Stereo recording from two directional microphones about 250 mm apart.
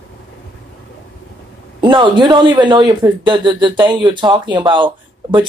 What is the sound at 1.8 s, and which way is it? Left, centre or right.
Speech, centre.